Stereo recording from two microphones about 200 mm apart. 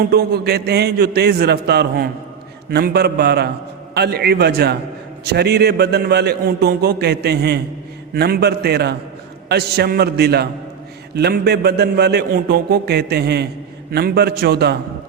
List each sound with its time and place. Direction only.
0.0 s a man's voice: 50° right (ahead or behind)